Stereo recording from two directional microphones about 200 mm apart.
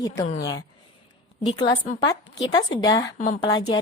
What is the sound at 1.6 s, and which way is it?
A woman's voice, 20° left (ahead or behind).